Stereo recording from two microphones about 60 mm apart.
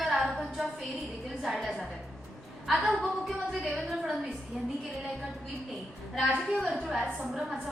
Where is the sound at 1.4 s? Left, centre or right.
Centre.